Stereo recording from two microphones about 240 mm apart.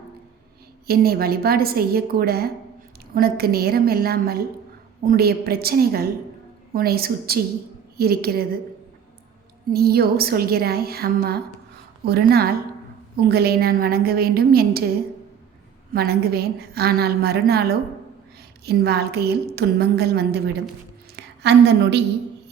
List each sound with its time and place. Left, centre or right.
0.9 s a woman's voice: right
9.6 s a woman's voice: right
15.9 s a woman's voice: right